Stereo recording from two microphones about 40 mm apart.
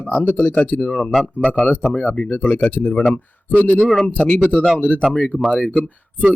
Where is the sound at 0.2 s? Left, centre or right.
Left.